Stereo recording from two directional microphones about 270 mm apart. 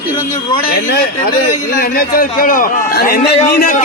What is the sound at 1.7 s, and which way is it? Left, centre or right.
A man's voice, left.